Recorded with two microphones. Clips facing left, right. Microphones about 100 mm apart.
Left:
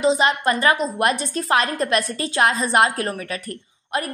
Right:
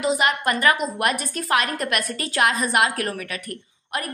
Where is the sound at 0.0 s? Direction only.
25° left (ahead or behind).